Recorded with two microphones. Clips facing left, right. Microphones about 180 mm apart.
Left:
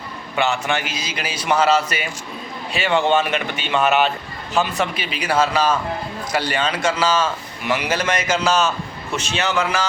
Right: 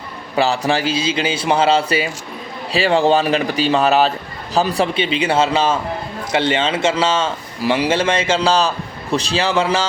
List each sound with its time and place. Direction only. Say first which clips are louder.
0.3 s a man's voice: right 4 dB; 35° right (ahead or behind)